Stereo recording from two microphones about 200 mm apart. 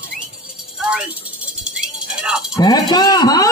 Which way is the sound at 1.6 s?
Centre (ahead or behind).